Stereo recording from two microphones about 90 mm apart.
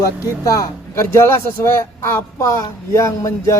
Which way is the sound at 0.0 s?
40° left (ahead or behind).